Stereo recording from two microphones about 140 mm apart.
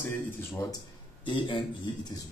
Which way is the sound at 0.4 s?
20° left (ahead or behind).